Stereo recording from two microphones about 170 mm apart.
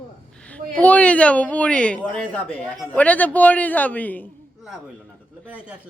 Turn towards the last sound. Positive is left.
turn(degrees=10)  # may be behind; listen again after turning